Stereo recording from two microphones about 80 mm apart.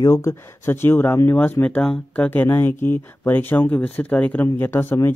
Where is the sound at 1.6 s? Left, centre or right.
Centre.